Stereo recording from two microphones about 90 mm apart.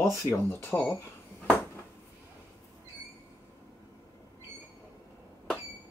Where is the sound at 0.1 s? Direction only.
30° left (ahead or behind).